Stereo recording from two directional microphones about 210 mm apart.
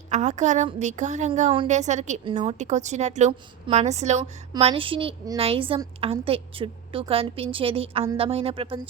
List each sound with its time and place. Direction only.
0.1 s a woman's voice: 35° right (ahead or behind)